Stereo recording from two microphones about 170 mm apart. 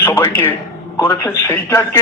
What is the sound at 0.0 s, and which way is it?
A man's voice, 15° left (ahead or behind).